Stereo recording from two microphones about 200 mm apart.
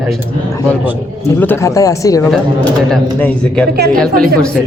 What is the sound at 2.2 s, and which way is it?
Speech, 5° left (ahead or behind).